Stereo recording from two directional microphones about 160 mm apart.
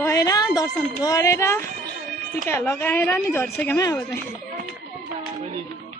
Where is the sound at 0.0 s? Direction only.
20° left (ahead or behind).